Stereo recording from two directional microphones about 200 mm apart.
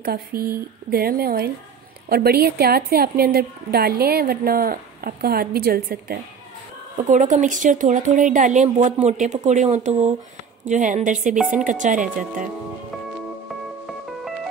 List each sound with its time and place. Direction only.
0.0 s a woman's voice: 50° right (ahead or behind)